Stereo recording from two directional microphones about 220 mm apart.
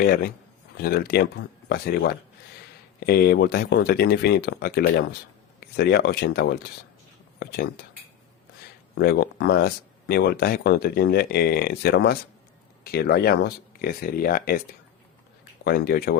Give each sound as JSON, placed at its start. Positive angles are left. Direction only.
{"t": 0.0, "sound": "speech", "side_deg": 45}
{"t": 9.0, "sound": "speech", "side_deg": 45}
{"t": 15.6, "sound": "speech", "side_deg": 45}